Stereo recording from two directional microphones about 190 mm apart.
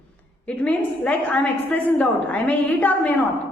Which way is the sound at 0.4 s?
5° left (ahead or behind).